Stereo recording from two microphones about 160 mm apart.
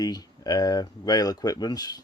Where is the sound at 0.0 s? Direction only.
25° left (ahead or behind).